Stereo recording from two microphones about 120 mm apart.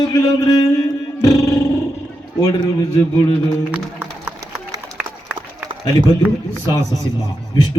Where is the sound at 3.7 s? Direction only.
10° right (ahead or behind).